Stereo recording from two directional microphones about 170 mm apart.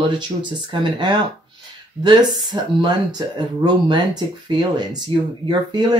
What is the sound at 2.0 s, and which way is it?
Speech, 25° right (ahead or behind).